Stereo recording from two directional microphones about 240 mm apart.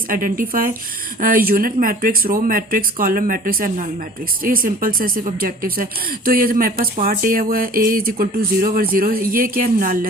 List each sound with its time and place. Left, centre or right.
0.1 s speech: right